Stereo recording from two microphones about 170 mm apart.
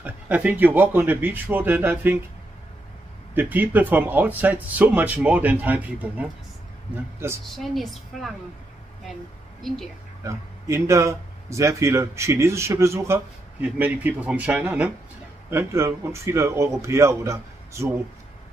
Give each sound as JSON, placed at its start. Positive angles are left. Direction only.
{"t": 0.0, "sound": "a man's voice", "side_deg": -10}
{"t": 3.3, "sound": "a man's voice", "side_deg": -10}
{"t": 7.5, "sound": "a woman's voice", "side_deg": 0}
{"t": 9.6, "sound": "a woman's voice", "side_deg": 0}
{"t": 10.2, "sound": "a man's voice", "side_deg": -15}